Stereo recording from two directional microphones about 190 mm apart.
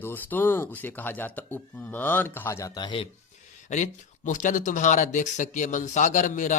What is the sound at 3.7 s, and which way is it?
Speech, 40° left (ahead or behind).